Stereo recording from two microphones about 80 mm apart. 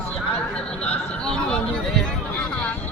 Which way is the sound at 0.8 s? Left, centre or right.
Centre.